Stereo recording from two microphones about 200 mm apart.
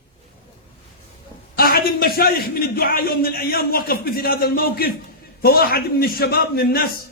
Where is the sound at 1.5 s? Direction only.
50° left (ahead or behind).